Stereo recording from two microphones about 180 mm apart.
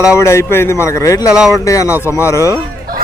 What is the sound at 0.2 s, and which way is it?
Speech, 15° left (ahead or behind).